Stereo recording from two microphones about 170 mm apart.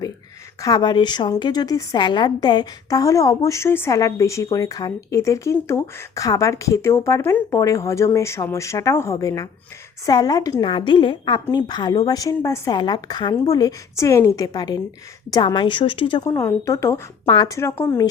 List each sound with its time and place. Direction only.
0.6 s a woman's voice: 25° left (ahead or behind)